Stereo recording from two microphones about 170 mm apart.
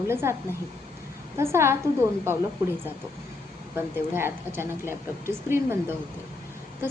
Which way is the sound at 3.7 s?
15° right (ahead or behind).